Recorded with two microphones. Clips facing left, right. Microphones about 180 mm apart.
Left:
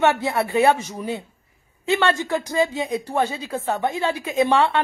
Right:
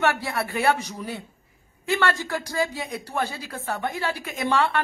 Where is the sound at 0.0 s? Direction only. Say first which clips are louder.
Left 5 dB; 25° left (ahead or behind).